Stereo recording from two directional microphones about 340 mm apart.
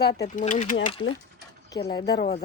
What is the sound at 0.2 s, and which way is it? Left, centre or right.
Speech, left.